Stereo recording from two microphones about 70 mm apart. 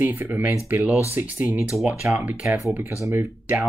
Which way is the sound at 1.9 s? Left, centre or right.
Right.